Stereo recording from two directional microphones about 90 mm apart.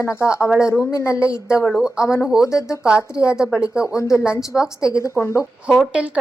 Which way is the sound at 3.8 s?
35° left (ahead or behind).